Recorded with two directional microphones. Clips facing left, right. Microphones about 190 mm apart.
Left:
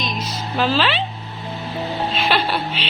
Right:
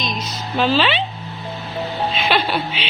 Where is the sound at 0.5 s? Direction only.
Centre (ahead or behind).